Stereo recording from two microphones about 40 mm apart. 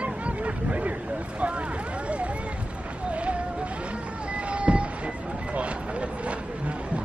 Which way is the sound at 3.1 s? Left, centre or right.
Right.